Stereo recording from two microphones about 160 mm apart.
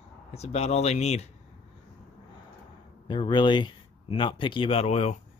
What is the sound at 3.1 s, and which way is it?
Speech, 30° left (ahead or behind).